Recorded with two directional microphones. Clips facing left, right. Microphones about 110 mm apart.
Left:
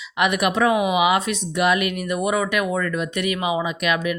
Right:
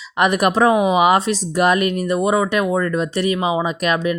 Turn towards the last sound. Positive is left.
turn(degrees=-35)  # may be behind; listen again after turning